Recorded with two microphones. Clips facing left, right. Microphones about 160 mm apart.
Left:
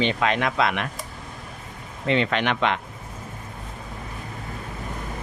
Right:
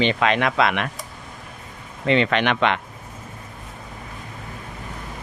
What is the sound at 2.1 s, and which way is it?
Speech, 75° right (ahead or behind).